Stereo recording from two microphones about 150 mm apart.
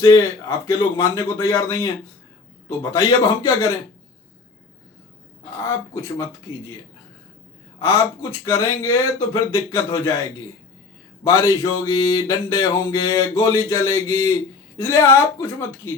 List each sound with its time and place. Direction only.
0.0 s speech: 20° left (ahead or behind)
5.6 s speech: 15° left (ahead or behind)
7.8 s speech: 20° left (ahead or behind)
11.2 s speech: 20° left (ahead or behind)